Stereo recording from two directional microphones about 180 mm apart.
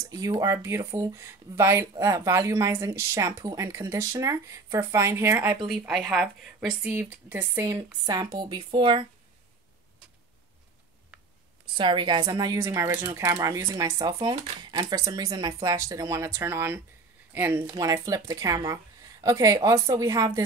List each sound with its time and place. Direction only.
0.0 s speech: 20° right (ahead or behind)
5.7 s speech: centre (ahead or behind)
6.8 s a woman's voice: 10° right (ahead or behind); by 9.0 s 25° right (ahead or behind)
11.7 s a woman's voice: 25° right (ahead or behind)